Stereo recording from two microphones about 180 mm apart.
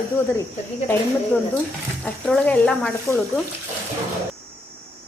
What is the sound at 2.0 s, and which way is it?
Speech, 5° left (ahead or behind).